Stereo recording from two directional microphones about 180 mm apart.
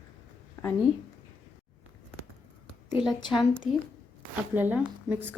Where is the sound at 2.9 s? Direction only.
5° right (ahead or behind).